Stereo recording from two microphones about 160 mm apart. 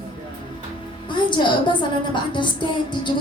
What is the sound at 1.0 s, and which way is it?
Music, 30° left (ahead or behind).